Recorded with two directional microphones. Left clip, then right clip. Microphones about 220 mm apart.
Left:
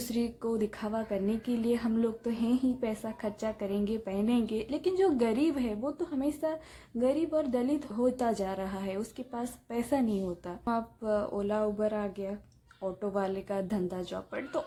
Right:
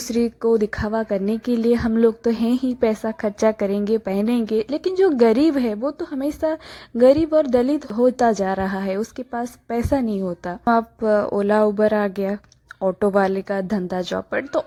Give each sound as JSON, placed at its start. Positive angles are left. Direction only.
{"t": 0.1, "sound": "speech", "side_deg": -30}